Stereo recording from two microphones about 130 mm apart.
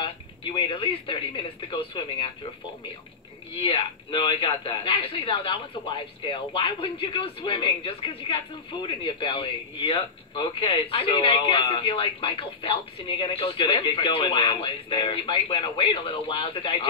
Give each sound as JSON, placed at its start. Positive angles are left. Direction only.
{"t": 0.0, "sound": "speech", "side_deg": 40}
{"t": 3.5, "sound": "speech", "side_deg": 45}